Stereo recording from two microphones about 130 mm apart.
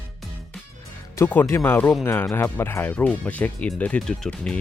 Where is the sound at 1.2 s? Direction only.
20° left (ahead or behind).